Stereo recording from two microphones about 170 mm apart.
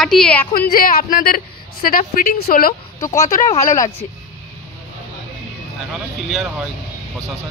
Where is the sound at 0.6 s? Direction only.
60° left (ahead or behind).